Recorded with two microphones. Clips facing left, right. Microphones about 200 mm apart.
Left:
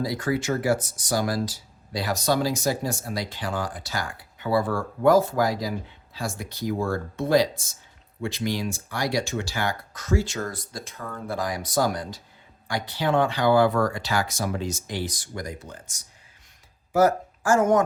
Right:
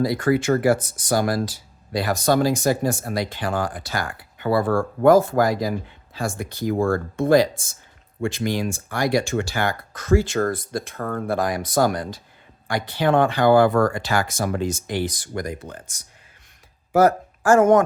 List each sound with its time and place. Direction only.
0.0 s speech: 60° right (ahead or behind)